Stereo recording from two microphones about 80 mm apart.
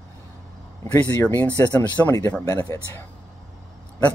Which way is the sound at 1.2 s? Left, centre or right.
Left.